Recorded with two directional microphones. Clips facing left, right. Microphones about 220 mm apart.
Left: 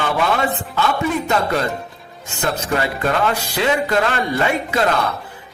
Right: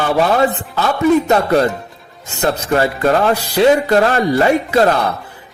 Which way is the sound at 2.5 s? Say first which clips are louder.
Right 5 dB; 40° right (ahead or behind).